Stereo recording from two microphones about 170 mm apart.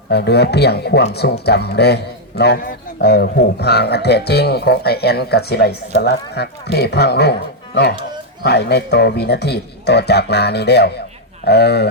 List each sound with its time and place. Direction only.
0.1 s speech: 75° left (ahead or behind)
8.4 s speech: 75° left (ahead or behind)